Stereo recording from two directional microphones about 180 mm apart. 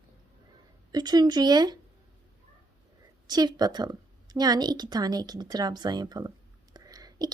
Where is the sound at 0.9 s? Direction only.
25° right (ahead or behind).